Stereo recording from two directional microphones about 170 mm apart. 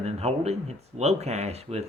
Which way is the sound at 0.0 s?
40° right (ahead or behind).